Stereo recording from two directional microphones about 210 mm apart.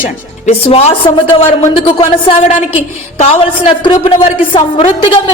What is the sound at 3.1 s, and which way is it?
A woman's voice, 30° left (ahead or behind).